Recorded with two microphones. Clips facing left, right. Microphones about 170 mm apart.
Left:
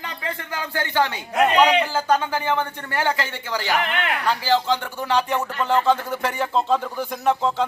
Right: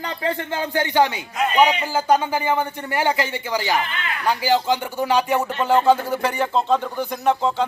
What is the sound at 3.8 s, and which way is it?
Speech, 75° left (ahead or behind).